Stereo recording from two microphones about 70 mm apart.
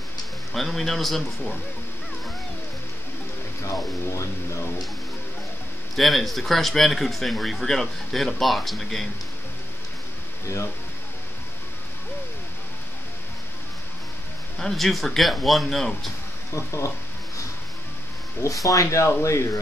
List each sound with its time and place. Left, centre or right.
0.5 s speech: centre
3.6 s speech: left
5.9 s speech: centre
10.4 s speech: left
14.6 s speech: centre
16.5 s speech: left
18.4 s speech: left